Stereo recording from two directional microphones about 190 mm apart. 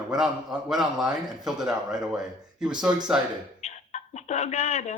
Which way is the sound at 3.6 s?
35° left (ahead or behind).